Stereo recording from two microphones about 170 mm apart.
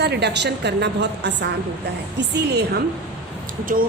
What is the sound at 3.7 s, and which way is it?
Speech, 55° right (ahead or behind).